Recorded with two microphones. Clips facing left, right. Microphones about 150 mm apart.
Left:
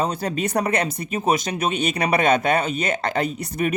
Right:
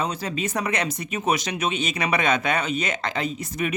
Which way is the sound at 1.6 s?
35° left (ahead or behind).